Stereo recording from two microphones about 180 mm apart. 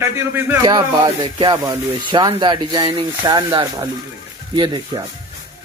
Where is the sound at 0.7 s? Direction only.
25° right (ahead or behind).